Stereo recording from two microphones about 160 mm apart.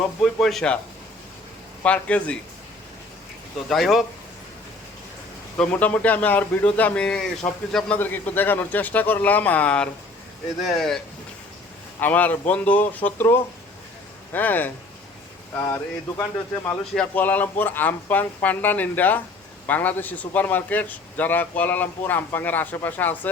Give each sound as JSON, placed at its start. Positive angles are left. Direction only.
{"t": 0.2, "sound": "speech", "side_deg": 0}
{"t": 1.8, "sound": "a man's voice", "side_deg": 10}
{"t": 3.7, "sound": "speech", "side_deg": 0}
{"t": 5.5, "sound": "a man's voice", "side_deg": 10}